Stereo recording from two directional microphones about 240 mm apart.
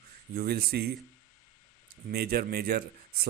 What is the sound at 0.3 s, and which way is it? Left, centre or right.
Speech, right.